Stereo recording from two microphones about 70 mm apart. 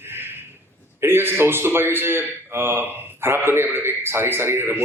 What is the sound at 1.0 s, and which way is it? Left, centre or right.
A man's voice, right.